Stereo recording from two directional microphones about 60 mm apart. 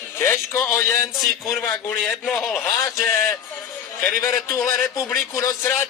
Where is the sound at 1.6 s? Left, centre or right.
Left.